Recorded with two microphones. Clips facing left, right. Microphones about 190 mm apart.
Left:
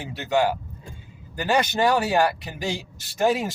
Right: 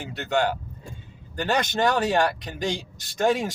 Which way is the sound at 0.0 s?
5° left (ahead or behind).